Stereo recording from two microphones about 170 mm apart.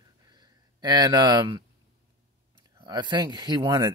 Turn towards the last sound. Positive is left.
turn(degrees=-25)  # may be behind; listen again after turning